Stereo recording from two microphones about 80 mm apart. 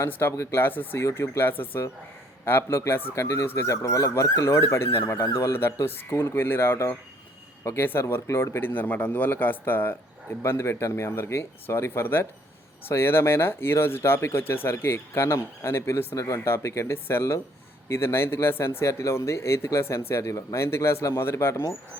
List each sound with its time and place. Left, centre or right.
0.0 s speech: left
1.0 s speech: left
16.1 s speech: left